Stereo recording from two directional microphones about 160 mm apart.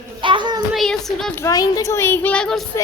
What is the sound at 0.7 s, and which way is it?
Child singing, centre (ahead or behind).